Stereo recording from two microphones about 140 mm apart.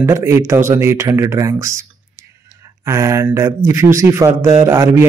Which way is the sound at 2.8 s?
20° right (ahead or behind).